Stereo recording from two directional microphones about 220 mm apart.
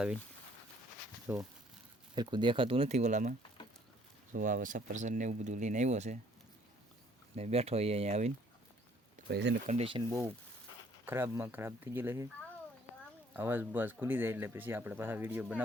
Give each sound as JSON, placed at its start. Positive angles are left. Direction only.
{"t": 1.3, "sound": "speech", "side_deg": -10}
{"t": 2.1, "sound": "speech", "side_deg": -20}
{"t": 7.3, "sound": "speech", "side_deg": -30}
{"t": 9.3, "sound": "speech", "side_deg": -50}
{"t": 9.6, "sound": "speech", "side_deg": -25}
{"t": 11.0, "sound": "speech", "side_deg": -10}
{"t": 13.3, "sound": "speech", "side_deg": -10}